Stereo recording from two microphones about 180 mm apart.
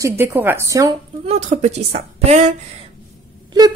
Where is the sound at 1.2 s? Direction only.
40° right (ahead or behind).